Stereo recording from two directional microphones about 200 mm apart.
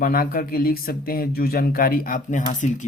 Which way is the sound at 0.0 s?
45° left (ahead or behind).